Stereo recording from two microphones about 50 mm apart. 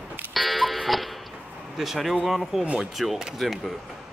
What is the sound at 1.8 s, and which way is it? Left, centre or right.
Speech, centre.